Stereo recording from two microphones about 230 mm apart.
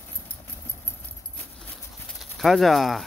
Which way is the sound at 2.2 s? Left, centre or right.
Centre.